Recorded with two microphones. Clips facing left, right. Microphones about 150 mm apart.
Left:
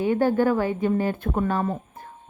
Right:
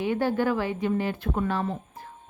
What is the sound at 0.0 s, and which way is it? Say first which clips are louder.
A woman's voice: left 4 dB; 45° left (ahead or behind).